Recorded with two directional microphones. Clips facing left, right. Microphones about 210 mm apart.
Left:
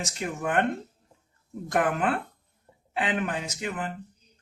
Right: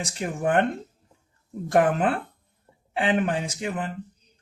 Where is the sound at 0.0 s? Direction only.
30° right (ahead or behind).